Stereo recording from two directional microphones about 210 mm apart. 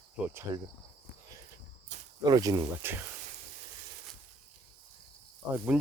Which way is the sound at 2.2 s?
15° right (ahead or behind).